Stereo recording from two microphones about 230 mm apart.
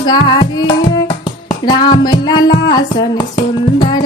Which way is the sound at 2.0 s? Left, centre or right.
Centre.